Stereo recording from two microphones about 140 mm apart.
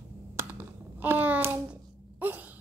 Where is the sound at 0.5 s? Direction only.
10° right (ahead or behind).